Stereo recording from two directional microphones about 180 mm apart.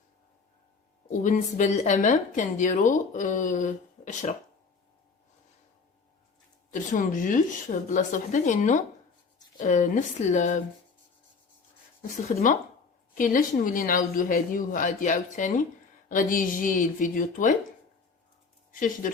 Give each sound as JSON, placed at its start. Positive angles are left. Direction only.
{"t": 1.1, "sound": "a woman's voice", "side_deg": 45}
{"t": 6.9, "sound": "a woman's voice", "side_deg": 45}
{"t": 12.1, "sound": "a woman's voice", "side_deg": 45}
{"t": 18.7, "sound": "a woman's voice", "side_deg": 50}